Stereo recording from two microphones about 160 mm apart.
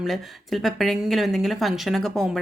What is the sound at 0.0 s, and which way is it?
A woman's voice, centre (ahead or behind).